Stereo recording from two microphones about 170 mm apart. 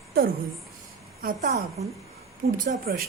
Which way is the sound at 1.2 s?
50° right (ahead or behind).